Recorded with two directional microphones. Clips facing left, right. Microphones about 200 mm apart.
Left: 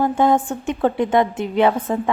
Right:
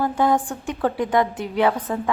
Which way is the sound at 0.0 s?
25° left (ahead or behind).